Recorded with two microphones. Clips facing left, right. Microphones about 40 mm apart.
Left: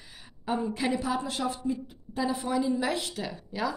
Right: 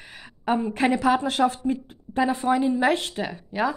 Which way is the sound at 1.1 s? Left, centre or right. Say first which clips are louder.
Right 9 dB; right.